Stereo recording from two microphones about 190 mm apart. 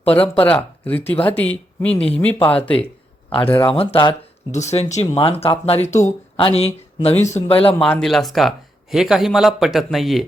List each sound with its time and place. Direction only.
0.4 s speech: 10° left (ahead or behind)
1.1 s speech: 30° left (ahead or behind)
1.4 s speech: 5° left (ahead or behind)
3.3 s speech: 25° left (ahead or behind)
7.8 s speech: 5° left (ahead or behind)